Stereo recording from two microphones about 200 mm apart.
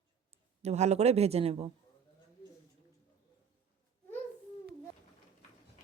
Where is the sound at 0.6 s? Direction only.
35° right (ahead or behind).